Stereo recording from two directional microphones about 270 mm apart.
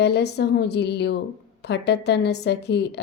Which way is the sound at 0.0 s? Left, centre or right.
Left.